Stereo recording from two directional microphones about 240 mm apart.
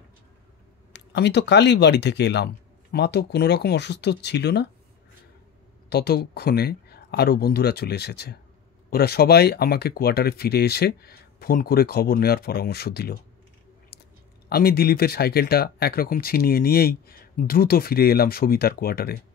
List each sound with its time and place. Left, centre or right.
0.9 s speech: left
5.9 s speech: left
14.5 s speech: left